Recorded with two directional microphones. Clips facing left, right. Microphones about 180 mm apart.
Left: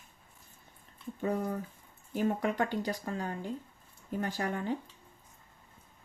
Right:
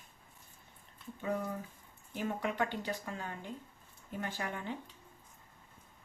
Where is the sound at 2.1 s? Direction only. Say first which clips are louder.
Left 6 dB; 40° left (ahead or behind).